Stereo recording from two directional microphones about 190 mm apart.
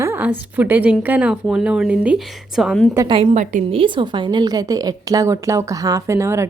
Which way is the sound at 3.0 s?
30° right (ahead or behind).